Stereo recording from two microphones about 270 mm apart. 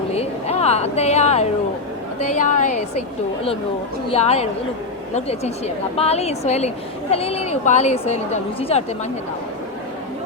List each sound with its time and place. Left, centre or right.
0.1 s a sound: left
2.2 s speech: left
4.1 s speech: left